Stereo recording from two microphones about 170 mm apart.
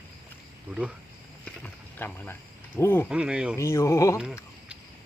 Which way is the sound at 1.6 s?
10° left (ahead or behind).